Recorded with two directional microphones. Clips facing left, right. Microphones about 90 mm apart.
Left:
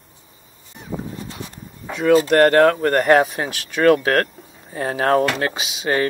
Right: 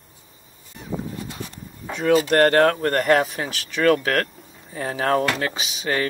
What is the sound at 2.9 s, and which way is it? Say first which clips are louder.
Speech: left 4 dB; 45° left (ahead or behind).